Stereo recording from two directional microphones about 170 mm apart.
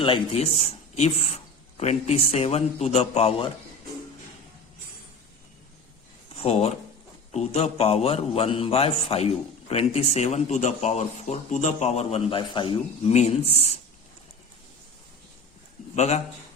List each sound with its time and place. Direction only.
0.0 s speech: 35° left (ahead or behind)
6.3 s speech: 35° left (ahead or behind)
16.0 s speech: 40° left (ahead or behind)